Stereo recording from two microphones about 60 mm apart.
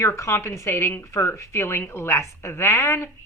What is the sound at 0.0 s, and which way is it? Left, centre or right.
Speech, left.